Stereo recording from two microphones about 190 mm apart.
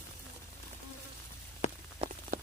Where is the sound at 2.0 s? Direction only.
40° right (ahead or behind).